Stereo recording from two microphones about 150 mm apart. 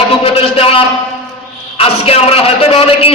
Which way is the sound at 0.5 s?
40° left (ahead or behind).